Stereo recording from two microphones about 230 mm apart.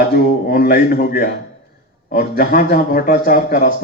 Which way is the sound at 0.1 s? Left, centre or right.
Left.